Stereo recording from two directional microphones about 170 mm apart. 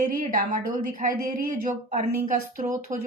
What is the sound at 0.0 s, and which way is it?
Speech, 55° right (ahead or behind).